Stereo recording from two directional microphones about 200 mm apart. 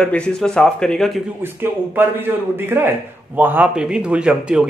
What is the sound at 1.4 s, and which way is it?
A man's voice, 10° right (ahead or behind).